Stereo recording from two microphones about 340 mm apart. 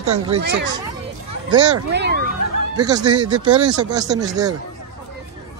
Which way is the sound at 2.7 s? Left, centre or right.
Centre.